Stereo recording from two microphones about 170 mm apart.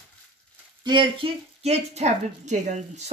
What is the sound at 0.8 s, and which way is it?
A woman's voice, 30° right (ahead or behind).